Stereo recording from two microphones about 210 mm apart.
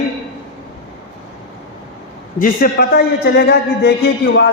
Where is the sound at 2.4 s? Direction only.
45° left (ahead or behind).